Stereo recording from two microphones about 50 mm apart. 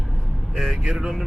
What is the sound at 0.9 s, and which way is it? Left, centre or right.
Speech, centre.